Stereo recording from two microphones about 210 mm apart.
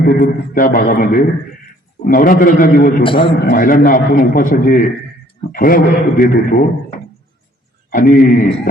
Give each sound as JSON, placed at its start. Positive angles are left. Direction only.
{"t": 0.0, "sound": "a man's voice", "side_deg": 45}
{"t": 3.0, "sound": "a man's voice", "side_deg": 25}
{"t": 3.4, "sound": "a man's voice", "side_deg": 45}
{"t": 7.9, "sound": "a man's voice", "side_deg": 40}